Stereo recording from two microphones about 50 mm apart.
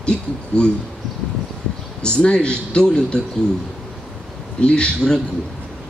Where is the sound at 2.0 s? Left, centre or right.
Left.